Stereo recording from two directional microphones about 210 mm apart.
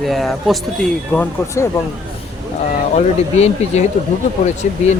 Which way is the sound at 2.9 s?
30° left (ahead or behind).